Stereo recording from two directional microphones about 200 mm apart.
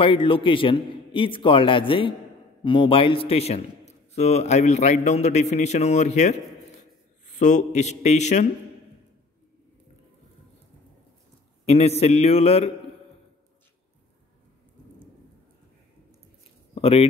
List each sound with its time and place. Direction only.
0.0 s a man's voice: 25° left (ahead or behind)
11.6 s a man's voice: 30° left (ahead or behind)
16.7 s speech: 30° left (ahead or behind)